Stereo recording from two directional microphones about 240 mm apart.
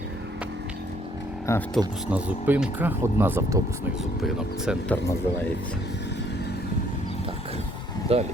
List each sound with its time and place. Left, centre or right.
1.5 s speech: centre
2.0 s speech: centre
8.1 s speech: right